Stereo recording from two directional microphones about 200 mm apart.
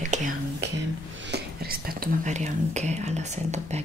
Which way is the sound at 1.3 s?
50° right (ahead or behind).